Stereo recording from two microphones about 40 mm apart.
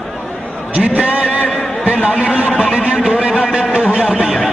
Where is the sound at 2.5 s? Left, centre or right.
Right.